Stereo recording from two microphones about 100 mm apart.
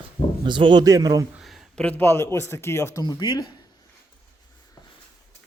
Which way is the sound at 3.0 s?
45° left (ahead or behind).